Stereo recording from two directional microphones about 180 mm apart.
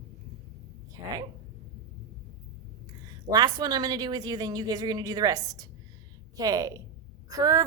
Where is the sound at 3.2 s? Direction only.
20° right (ahead or behind).